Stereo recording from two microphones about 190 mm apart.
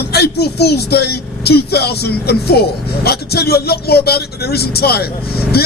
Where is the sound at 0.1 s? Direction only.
60° left (ahead or behind).